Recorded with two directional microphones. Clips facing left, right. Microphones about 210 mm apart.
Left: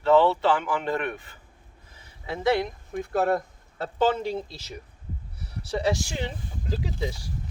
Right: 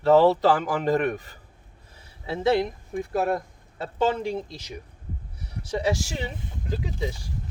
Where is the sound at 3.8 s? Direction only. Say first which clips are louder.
Even; centre (ahead or behind).